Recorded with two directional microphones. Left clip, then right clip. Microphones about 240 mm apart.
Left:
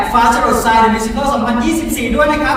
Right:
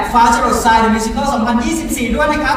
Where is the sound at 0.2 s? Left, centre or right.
Left.